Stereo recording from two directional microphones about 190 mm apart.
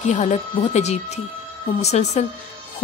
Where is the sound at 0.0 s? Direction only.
40° left (ahead or behind).